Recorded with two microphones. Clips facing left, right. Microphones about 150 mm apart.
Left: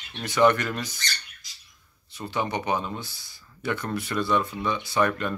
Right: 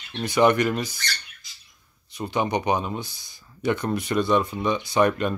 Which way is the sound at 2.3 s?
15° right (ahead or behind).